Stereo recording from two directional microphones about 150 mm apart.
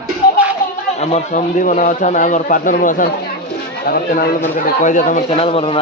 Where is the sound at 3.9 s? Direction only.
65° left (ahead or behind).